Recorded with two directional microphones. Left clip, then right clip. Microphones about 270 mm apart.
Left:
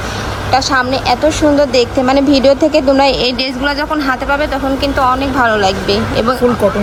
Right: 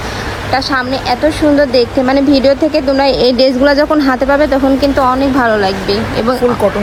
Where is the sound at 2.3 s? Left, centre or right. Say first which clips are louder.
Left 1 dB; centre.